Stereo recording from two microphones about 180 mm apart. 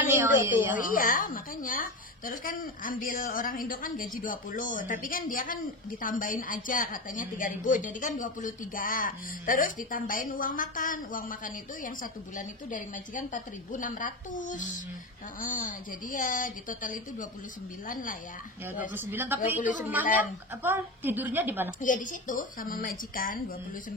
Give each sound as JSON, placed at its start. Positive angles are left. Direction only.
{"t": 0.1, "sound": "a sound", "side_deg": -15}
{"t": 0.7, "sound": "a woman's voice", "side_deg": 50}
{"t": 18.9, "sound": "a woman's voice", "side_deg": -10}
{"t": 21.8, "sound": "a woman's voice", "side_deg": 45}